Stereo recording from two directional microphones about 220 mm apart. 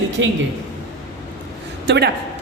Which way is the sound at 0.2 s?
55° right (ahead or behind).